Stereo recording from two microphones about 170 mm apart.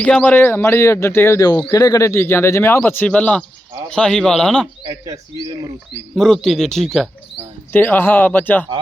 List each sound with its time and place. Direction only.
0.0 s speech: 10° left (ahead or behind)
4.9 s speech: 20° right (ahead or behind)
6.1 s speech: centre (ahead or behind)